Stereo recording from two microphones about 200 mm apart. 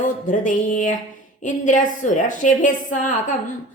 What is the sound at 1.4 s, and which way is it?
A woman's voice, 40° left (ahead or behind).